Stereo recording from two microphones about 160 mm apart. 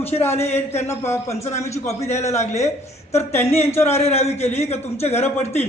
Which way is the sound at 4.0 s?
40° left (ahead or behind).